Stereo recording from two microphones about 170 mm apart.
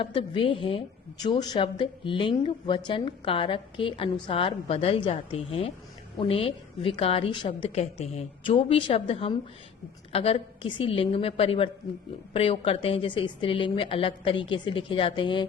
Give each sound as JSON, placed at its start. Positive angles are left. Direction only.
{"t": 0.0, "sound": "a woman's voice", "side_deg": 30}